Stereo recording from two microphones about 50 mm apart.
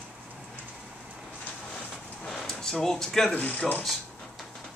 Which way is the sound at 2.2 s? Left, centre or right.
Centre.